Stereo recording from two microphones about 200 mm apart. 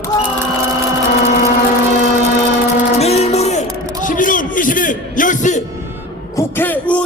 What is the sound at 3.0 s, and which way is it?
Music, 30° left (ahead or behind).